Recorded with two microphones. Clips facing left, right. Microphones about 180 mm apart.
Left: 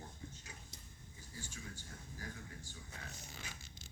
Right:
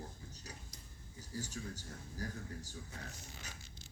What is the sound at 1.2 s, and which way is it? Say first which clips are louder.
A man's voice: right 8 dB; 40° right (ahead or behind).